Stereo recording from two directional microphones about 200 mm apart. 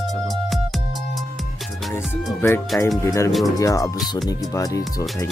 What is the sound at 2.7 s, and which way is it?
Speech, 10° left (ahead or behind).